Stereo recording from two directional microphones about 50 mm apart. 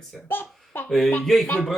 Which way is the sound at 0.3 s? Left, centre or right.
Left.